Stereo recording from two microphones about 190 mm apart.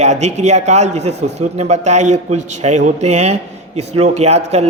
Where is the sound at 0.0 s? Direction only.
35° right (ahead or behind).